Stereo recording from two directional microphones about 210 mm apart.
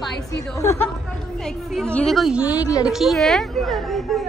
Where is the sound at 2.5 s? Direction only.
15° left (ahead or behind).